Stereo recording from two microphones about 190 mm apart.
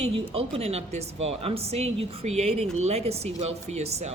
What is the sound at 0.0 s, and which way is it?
Speech, 30° right (ahead or behind).